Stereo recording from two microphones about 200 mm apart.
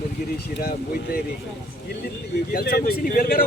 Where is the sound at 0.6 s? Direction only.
45° left (ahead or behind).